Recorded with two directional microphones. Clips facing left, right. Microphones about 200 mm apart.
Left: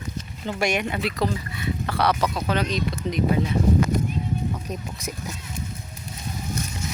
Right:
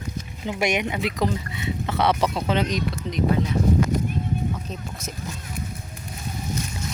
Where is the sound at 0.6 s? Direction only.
20° right (ahead or behind).